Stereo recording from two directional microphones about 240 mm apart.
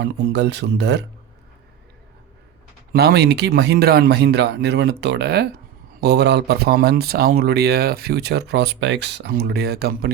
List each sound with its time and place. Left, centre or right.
0.0 s speech: right
2.9 s speech: right